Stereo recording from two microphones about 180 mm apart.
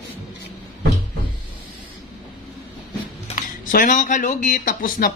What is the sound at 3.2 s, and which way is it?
Speech, 45° left (ahead or behind).